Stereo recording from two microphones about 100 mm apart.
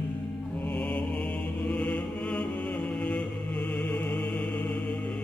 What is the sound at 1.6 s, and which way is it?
Chant, 15° left (ahead or behind).